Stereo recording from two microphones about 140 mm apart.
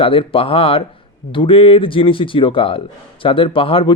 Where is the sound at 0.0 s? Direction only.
40° left (ahead or behind).